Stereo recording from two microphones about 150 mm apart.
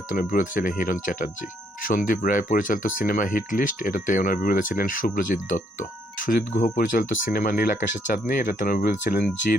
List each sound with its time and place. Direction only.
0.1 s speech: 65° left (ahead or behind)